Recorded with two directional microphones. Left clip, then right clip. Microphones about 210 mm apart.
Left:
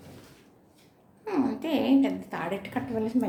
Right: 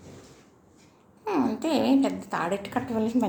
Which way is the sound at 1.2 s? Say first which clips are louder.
Right 3 dB; 10° right (ahead or behind).